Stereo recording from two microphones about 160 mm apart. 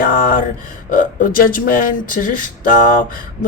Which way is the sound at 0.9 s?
60° left (ahead or behind).